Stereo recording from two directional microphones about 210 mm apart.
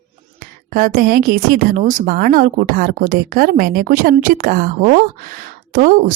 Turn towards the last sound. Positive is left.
turn(degrees=-40)  # may be behind; listen again after turning